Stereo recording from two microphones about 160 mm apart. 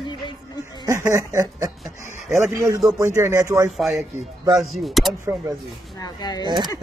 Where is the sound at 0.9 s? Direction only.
20° right (ahead or behind).